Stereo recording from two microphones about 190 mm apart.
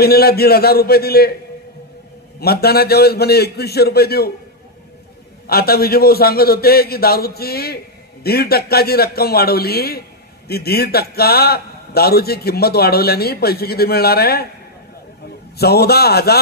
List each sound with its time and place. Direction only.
0.0 s a man's voice: 55° left (ahead or behind)
2.4 s a man's voice: 55° left (ahead or behind)
5.5 s a man's voice: 55° left (ahead or behind)
15.5 s a man's voice: 55° left (ahead or behind)